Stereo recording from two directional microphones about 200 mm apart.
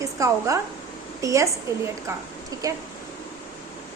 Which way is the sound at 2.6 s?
15° right (ahead or behind).